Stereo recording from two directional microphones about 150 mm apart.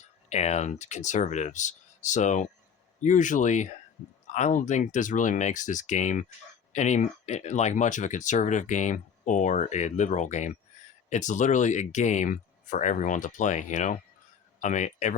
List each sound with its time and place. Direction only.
0.0 s speech: 50° left (ahead or behind)